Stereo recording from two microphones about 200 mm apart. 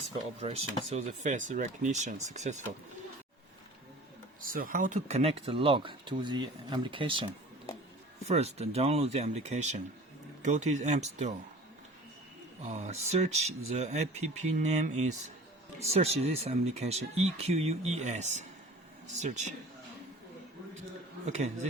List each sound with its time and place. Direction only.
0.9 s speech: 35° right (ahead or behind)
4.4 s speech: 45° right (ahead or behind); by 7.3 s 25° right (ahead or behind)
8.3 s speech: 30° right (ahead or behind)
12.6 s speech: 35° right (ahead or behind)
21.2 s speech: 35° right (ahead or behind)